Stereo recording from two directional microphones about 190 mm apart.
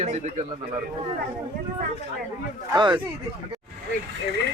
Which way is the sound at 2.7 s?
25° right (ahead or behind).